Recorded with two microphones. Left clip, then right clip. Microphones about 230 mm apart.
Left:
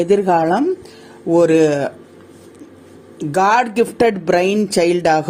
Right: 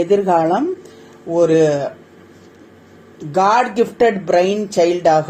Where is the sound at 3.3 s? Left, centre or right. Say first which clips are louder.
Even; left.